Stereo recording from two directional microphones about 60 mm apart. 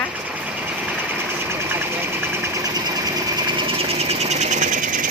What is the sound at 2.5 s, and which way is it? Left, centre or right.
Engine, right.